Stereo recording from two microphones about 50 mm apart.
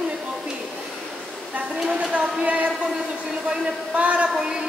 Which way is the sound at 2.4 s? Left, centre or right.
Right.